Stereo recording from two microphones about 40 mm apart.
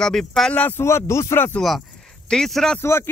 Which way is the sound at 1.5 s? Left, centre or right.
Left.